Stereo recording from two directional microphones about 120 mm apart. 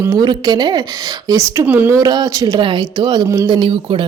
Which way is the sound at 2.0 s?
30° right (ahead or behind).